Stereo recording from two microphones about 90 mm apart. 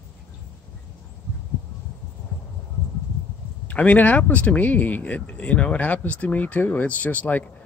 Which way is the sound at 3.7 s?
15° left (ahead or behind).